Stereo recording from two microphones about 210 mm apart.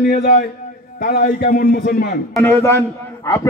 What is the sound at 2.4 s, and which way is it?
Speech, 15° left (ahead or behind).